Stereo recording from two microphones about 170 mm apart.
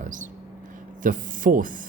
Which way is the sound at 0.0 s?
50° right (ahead or behind).